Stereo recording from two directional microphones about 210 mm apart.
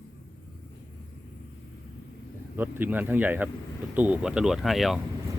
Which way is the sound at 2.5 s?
10° right (ahead or behind).